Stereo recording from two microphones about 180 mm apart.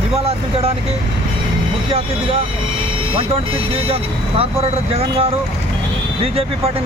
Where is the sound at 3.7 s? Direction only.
30° right (ahead or behind).